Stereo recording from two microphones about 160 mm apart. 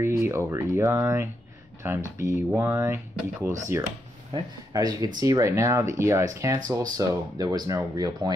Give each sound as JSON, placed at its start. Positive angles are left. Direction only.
{"t": 0.0, "sound": "speech", "side_deg": -15}
{"t": 4.7, "sound": "speech", "side_deg": -20}